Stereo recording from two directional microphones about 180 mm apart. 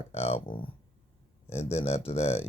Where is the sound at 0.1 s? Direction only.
35° left (ahead or behind).